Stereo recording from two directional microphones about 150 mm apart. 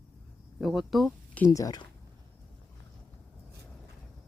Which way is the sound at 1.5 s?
25° left (ahead or behind).